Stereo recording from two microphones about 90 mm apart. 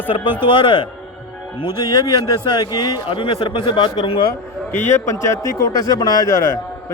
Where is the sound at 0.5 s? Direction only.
60° left (ahead or behind).